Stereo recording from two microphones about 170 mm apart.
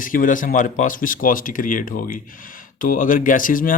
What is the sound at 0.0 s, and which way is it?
Speech, 55° left (ahead or behind).